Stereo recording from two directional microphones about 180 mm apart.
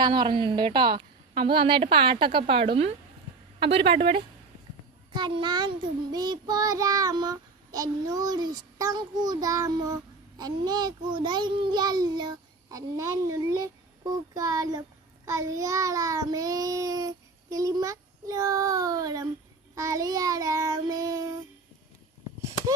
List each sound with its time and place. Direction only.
0.0 s child singing: 25° right (ahead or behind)
3.6 s speech: 30° right (ahead or behind)
5.1 s child singing: 25° right (ahead or behind)